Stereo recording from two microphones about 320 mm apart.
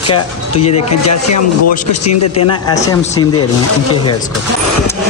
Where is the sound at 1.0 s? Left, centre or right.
Left.